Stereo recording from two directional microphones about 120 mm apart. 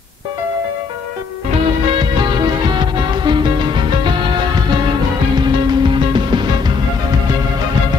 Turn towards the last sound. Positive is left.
turn(degrees=-40)  # may be behind; listen again after turning